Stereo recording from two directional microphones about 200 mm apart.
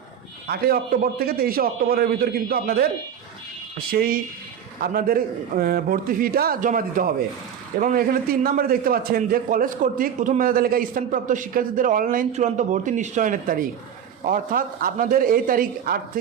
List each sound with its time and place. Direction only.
0.4 s a man's voice: 50° right (ahead or behind)